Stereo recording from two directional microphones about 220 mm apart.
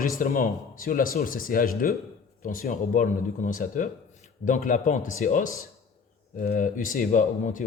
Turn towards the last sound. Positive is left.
turn(degrees=35)  # may be behind; listen again after turning